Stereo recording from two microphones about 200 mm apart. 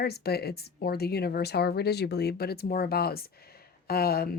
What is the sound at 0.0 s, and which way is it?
Speech, 50° left (ahead or behind).